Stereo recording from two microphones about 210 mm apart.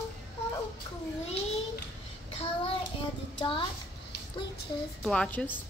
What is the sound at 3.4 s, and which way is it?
Speech, 25° left (ahead or behind).